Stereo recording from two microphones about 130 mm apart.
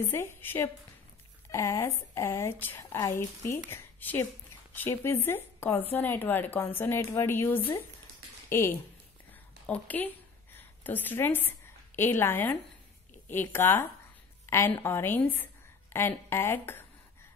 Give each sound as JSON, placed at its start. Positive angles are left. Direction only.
{"t": 0.1, "sound": "a woman's voice", "side_deg": 15}